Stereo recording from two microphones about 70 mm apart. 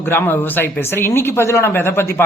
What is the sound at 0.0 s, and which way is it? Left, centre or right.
A man's voice, left.